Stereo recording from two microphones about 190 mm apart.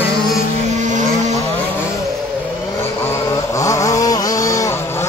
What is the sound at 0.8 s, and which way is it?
Vehicle, 40° right (ahead or behind).